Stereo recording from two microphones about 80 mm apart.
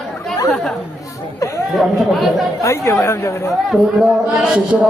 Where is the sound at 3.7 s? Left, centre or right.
Centre.